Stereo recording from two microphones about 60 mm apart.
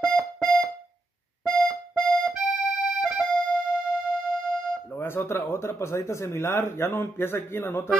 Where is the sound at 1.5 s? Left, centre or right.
Centre.